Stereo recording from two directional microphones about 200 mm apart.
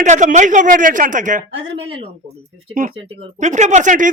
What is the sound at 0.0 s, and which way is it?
Speech, 35° right (ahead or behind).